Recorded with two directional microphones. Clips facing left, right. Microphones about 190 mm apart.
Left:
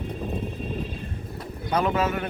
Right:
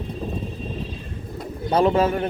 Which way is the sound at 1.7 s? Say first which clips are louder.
Right 5 dB; 30° right (ahead or behind).